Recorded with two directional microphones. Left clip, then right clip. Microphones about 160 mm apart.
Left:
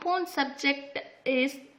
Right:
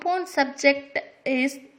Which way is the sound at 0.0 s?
20° right (ahead or behind).